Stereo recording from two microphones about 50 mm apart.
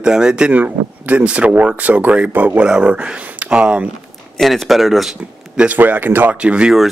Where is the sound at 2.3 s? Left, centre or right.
Right.